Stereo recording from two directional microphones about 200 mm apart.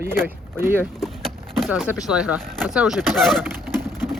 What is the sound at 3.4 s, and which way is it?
Bird, 10° right (ahead or behind).